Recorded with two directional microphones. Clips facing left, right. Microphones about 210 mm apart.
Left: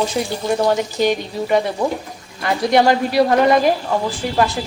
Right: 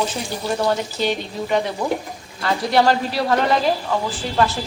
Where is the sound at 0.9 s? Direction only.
10° left (ahead or behind).